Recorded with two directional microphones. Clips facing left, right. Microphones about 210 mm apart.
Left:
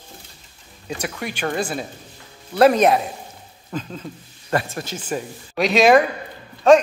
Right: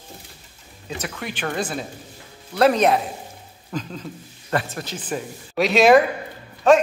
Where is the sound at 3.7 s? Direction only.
Centre (ahead or behind).